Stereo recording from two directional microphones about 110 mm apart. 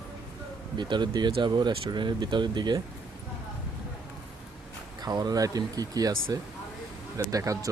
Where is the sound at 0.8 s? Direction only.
45° right (ahead or behind).